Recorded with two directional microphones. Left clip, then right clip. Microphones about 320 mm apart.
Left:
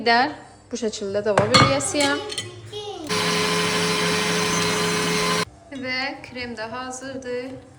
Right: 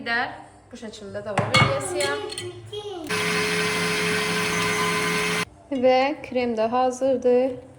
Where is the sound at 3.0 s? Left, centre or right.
Centre.